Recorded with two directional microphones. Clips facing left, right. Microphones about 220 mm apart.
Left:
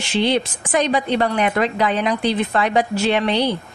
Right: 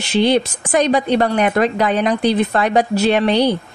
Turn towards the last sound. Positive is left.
turn(degrees=-40)  # may be behind; listen again after turning